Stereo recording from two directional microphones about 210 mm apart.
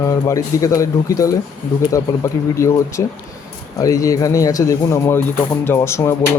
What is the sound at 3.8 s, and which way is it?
Speech, 15° left (ahead or behind).